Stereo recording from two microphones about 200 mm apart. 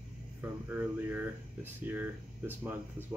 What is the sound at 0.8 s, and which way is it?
Speech, 10° right (ahead or behind).